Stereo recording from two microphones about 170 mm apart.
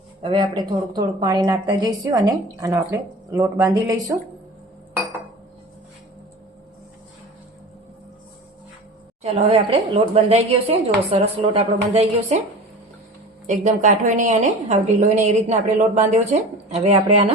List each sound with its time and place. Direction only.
0.2 s a woman's voice: 30° right (ahead or behind)
9.2 s speech: 35° right (ahead or behind)
13.5 s a woman's voice: 45° right (ahead or behind)